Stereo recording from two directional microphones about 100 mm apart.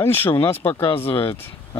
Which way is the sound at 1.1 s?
65° left (ahead or behind).